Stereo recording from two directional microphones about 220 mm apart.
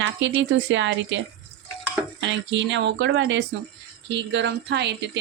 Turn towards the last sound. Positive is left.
turn(degrees=-50)  # may be behind; listen again after turning